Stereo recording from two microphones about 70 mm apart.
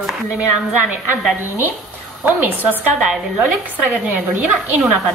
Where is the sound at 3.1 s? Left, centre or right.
Centre.